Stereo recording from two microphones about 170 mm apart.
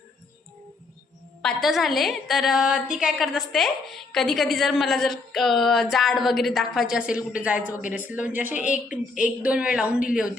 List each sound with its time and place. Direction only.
1.4 s a woman's voice: centre (ahead or behind)